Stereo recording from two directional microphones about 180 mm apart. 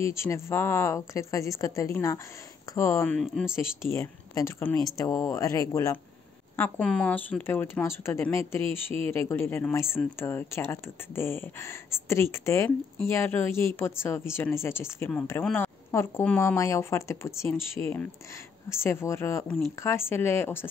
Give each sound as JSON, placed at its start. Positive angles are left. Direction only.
{"t": 0.0, "sound": "speech", "side_deg": 15}
{"t": 3.2, "sound": "speech", "side_deg": 0}
{"t": 3.9, "sound": "speech", "side_deg": 15}